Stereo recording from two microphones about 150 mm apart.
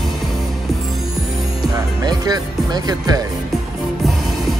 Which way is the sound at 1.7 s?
25° right (ahead or behind).